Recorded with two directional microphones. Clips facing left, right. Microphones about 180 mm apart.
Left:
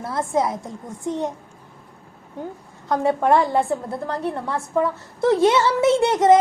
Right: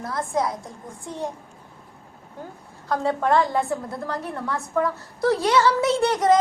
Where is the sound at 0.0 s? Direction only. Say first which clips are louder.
Left 3 dB; 25° left (ahead or behind).